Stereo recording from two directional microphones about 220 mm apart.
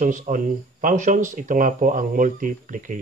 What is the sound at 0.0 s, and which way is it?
Speech, 35° right (ahead or behind).